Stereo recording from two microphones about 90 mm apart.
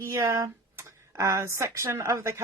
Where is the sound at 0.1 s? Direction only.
35° right (ahead or behind).